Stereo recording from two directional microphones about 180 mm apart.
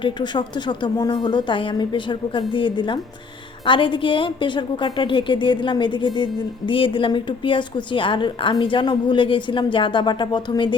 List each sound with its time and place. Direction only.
0.0 s a woman's voice: 25° left (ahead or behind)